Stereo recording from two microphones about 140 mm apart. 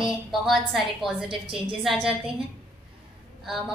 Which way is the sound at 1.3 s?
40° right (ahead or behind).